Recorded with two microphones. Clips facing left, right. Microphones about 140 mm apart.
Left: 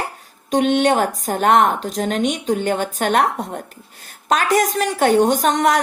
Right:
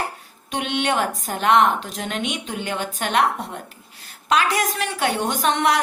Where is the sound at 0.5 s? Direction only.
40° left (ahead or behind).